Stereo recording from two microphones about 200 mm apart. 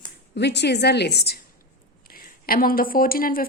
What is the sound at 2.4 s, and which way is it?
A woman's voice, 45° left (ahead or behind).